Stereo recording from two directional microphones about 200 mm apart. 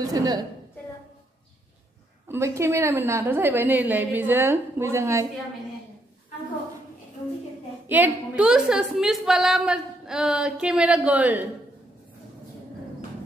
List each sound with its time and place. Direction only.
0.0 s a woman's voice: 20° right (ahead or behind)
2.2 s a woman's voice: 15° right (ahead or behind)
7.9 s a woman's voice: 5° right (ahead or behind)